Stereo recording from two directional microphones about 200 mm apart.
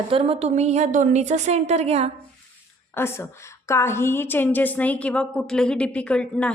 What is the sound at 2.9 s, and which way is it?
A woman's voice, 10° left (ahead or behind).